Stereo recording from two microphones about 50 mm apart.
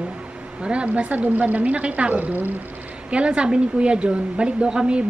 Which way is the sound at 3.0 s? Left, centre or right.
Right.